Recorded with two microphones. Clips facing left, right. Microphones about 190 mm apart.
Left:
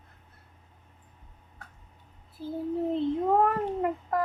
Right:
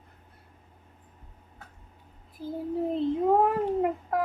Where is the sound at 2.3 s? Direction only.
15° right (ahead or behind).